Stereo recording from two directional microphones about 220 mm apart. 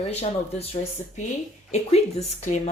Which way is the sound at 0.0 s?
30° left (ahead or behind).